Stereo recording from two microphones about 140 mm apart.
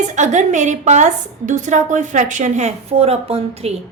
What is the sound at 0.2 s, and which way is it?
A woman's voice, 60° right (ahead or behind).